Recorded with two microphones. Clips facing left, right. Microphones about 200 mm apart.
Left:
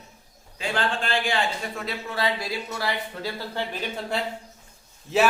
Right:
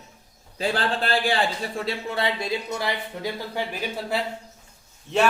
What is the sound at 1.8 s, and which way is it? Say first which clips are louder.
A man's voice: even; 25° right (ahead or behind).